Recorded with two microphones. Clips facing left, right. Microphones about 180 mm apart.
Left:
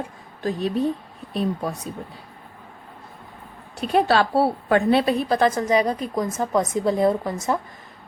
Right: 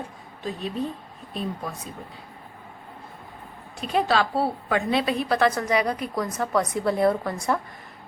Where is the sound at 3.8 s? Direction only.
60° left (ahead or behind).